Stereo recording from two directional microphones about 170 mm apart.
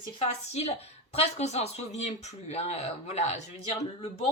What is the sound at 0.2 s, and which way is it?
A woman's voice, 40° left (ahead or behind).